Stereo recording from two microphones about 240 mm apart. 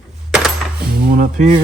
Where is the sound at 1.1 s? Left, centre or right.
Right.